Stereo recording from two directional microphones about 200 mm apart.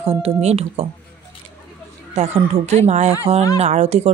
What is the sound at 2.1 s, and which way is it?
Speech, 35° right (ahead or behind).